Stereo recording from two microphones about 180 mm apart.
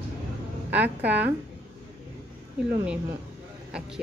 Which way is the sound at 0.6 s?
10° right (ahead or behind).